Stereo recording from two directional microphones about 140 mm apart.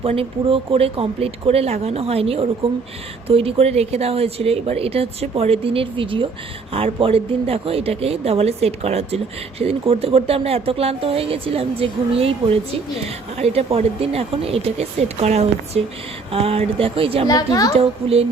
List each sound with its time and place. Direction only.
0.0 s speech: 40° right (ahead or behind)
17.2 s a child's voice: 25° left (ahead or behind)
17.7 s speech: 45° right (ahead or behind)